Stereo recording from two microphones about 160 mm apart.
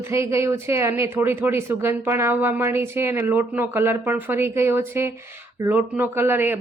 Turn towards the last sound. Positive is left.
turn(degrees=-15)  # may be behind; listen again after turning